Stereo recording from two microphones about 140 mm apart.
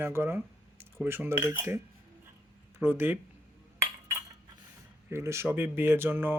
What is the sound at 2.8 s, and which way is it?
Speech, 15° right (ahead or behind).